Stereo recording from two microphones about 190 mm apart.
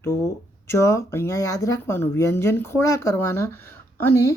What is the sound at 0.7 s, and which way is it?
Speech, 15° left (ahead or behind).